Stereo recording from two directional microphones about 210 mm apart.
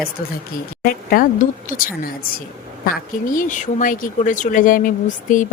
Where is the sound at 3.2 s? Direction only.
40° left (ahead or behind).